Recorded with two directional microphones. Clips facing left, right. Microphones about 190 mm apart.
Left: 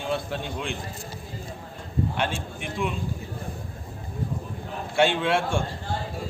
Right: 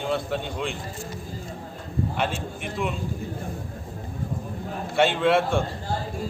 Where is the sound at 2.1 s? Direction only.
Centre (ahead or behind).